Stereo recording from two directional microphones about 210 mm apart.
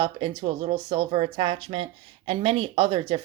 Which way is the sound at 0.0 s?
25° right (ahead or behind).